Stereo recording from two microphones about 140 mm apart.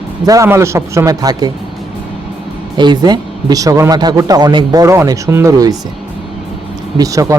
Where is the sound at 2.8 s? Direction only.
30° right (ahead or behind).